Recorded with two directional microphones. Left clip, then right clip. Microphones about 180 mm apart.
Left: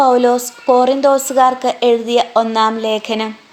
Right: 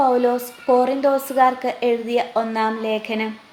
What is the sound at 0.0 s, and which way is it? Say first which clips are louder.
Speech: left 6 dB; 25° left (ahead or behind).